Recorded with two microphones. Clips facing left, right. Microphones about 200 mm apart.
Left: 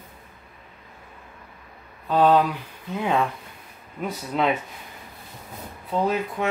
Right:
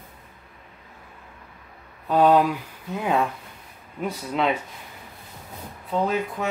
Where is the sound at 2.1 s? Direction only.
10° right (ahead or behind).